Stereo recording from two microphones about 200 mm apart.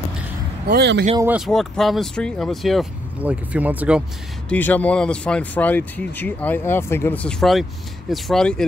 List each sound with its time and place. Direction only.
0.7 s speech: 55° right (ahead or behind)
1.2 s speech: 5° right (ahead or behind)
4.5 s speech: 10° left (ahead or behind)